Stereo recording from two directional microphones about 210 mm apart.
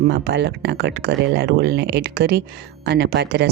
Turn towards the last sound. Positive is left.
turn(degrees=-50)  # may be behind; listen again after turning